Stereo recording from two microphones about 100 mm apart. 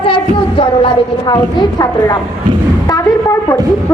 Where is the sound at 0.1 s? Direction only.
60° left (ahead or behind).